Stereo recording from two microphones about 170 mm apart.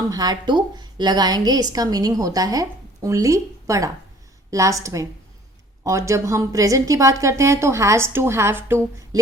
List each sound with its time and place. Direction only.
0.1 s a woman's voice: 20° right (ahead or behind)